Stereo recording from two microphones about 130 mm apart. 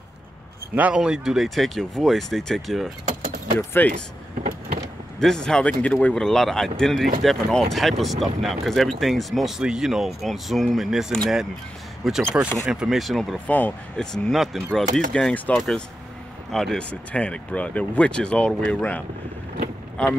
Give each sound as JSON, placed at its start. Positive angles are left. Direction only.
{"t": 0.7, "sound": "speech", "side_deg": -10}
{"t": 3.5, "sound": "speech", "side_deg": 15}
{"t": 5.2, "sound": "speech", "side_deg": 5}
{"t": 13.5, "sound": "speech", "side_deg": 10}